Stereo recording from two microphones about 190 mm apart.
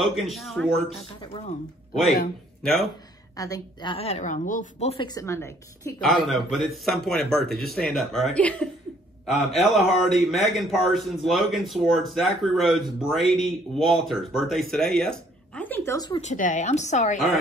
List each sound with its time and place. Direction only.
0.2 s speech: centre (ahead or behind)
2.6 s speech: centre (ahead or behind)
3.3 s a woman's voice: 20° left (ahead or behind); by 5.0 s 35° left (ahead or behind)
5.0 s a woman's voice: 15° left (ahead or behind)
6.0 s speech: centre (ahead or behind); by 16.2 s 15° left (ahead or behind)
16.2 s a woman's voice: 40° left (ahead or behind)